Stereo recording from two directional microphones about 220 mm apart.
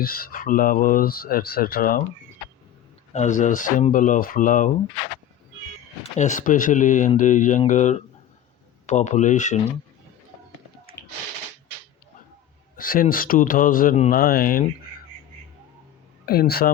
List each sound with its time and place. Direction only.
0.0 s speech: 40° left (ahead or behind)
3.1 s speech: 35° left (ahead or behind)
6.0 s speech: 35° left (ahead or behind)
12.7 s speech: 40° left (ahead or behind)
16.2 s speech: 45° left (ahead or behind)